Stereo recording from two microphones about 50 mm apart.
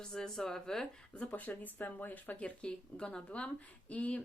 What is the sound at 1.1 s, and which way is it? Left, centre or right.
Speech, left.